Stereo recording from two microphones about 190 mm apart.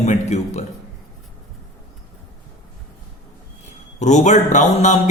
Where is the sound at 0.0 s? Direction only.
35° left (ahead or behind).